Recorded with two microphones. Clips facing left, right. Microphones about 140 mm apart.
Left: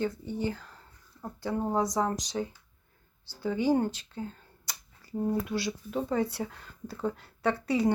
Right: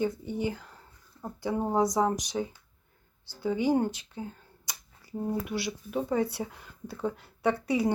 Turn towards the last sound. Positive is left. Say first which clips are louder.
# even
turn(degrees=-15)  # may be behind; listen again after turning